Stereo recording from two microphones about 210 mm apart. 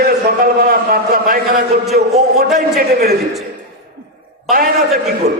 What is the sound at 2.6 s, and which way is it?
Speech, 45° right (ahead or behind).